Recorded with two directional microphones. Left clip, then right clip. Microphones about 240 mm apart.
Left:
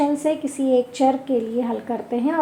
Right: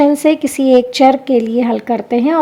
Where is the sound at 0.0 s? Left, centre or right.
Right.